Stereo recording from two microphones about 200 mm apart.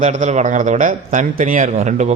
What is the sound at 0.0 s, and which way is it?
A man's voice, 35° right (ahead or behind).